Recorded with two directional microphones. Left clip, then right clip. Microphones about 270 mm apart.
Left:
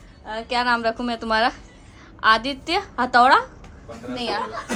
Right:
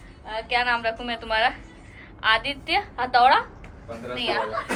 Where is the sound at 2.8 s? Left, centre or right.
Left.